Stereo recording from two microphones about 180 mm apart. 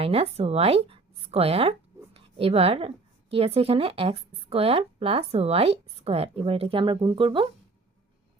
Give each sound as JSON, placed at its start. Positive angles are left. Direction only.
{"t": 0.0, "sound": "a woman's voice", "side_deg": -35}